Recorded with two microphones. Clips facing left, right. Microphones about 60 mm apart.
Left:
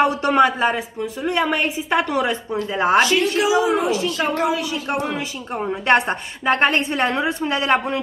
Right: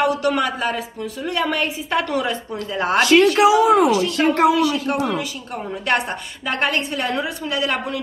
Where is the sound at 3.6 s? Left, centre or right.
Right.